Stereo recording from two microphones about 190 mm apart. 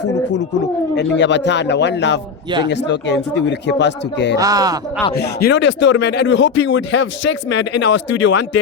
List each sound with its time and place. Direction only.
0.9 s speech: 65° left (ahead or behind)
4.4 s speech: 20° right (ahead or behind)
5.1 s speech: 60° left (ahead or behind)